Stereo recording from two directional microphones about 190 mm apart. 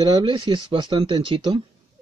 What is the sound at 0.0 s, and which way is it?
A man's voice, 25° right (ahead or behind).